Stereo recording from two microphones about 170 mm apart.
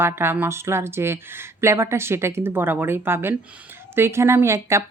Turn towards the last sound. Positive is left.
turn(degrees=-15)  # may be behind; listen again after turning